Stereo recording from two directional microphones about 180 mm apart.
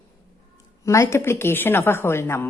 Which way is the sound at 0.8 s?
15° left (ahead or behind).